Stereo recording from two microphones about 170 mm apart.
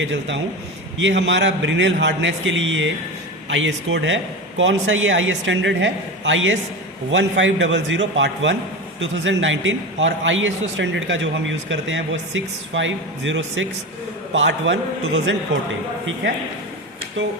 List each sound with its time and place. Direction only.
0.0 s a man's voice: 90° right